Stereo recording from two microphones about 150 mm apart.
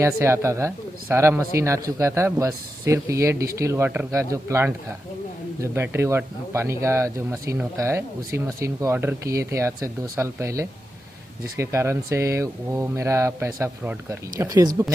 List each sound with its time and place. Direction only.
0.0 s speech: 20° right (ahead or behind)